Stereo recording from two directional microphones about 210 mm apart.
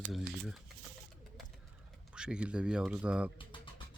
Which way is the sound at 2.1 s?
5° right (ahead or behind).